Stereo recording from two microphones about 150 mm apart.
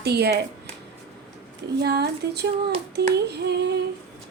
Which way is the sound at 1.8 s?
90° right.